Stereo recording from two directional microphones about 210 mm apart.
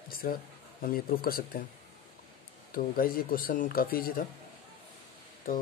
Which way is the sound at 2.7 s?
45° left (ahead or behind).